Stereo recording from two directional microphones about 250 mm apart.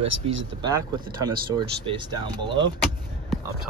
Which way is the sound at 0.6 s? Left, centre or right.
Centre.